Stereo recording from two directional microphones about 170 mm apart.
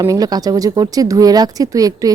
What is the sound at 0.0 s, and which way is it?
Speech, 20° right (ahead or behind).